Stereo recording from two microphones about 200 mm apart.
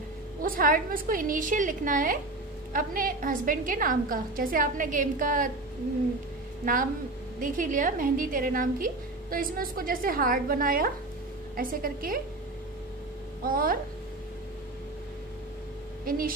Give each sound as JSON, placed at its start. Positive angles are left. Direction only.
{"t": 0.4, "sound": "a woman's voice", "side_deg": -45}
{"t": 6.6, "sound": "a woman's voice", "side_deg": -45}
{"t": 13.4, "sound": "a woman's voice", "side_deg": -45}
{"t": 16.1, "sound": "a woman's voice", "side_deg": -45}